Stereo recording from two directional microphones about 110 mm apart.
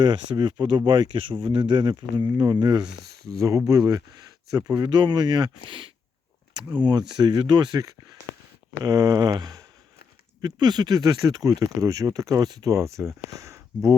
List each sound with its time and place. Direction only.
0.0 s speech: 45° right (ahead or behind)
5.6 s speech: 50° right (ahead or behind)
12.7 s speech: 25° right (ahead or behind)